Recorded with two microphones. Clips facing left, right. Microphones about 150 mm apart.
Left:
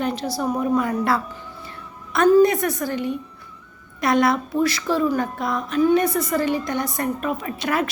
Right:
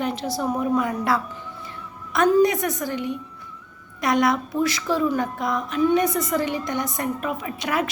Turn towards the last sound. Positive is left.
turn(degrees=-15)  # may be behind; listen again after turning